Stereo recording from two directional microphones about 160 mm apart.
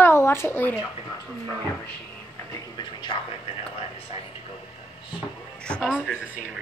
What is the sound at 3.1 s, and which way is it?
Speech, 25° left (ahead or behind).